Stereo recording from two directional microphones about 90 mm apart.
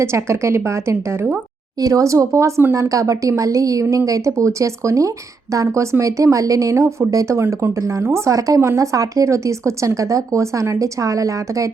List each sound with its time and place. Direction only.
0.0 s a woman's voice: 30° right (ahead or behind)